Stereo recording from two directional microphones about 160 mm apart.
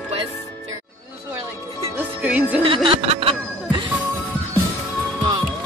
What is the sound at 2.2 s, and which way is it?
Music, 10° right (ahead or behind).